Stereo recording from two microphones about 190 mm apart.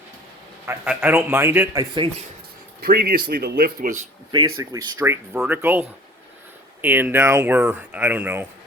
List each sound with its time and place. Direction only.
0.6 s a man's voice: 15° right (ahead or behind)
2.8 s speech: 50° right (ahead or behind)
4.3 s speech: 20° right (ahead or behind)
6.8 s speech: 10° right (ahead or behind)